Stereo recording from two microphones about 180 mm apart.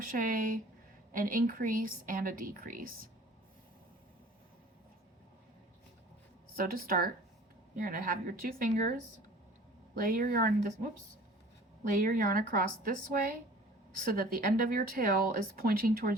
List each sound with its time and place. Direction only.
0.0 s speech: 50° right (ahead or behind)
6.6 s speech: 55° right (ahead or behind)
11.8 s speech: 50° right (ahead or behind)
14.0 s speech: 55° right (ahead or behind)